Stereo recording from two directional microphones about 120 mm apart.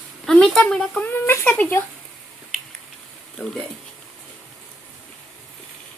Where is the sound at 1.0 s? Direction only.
15° left (ahead or behind).